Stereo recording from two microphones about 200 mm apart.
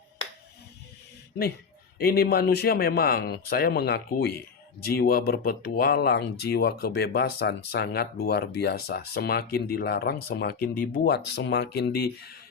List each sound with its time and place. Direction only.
2.0 s speech: 50° left (ahead or behind)